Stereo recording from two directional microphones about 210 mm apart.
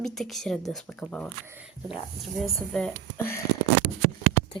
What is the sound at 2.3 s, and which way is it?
A woman's voice, centre (ahead or behind).